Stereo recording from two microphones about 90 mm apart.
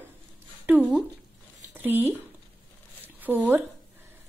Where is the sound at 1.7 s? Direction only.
20° right (ahead or behind).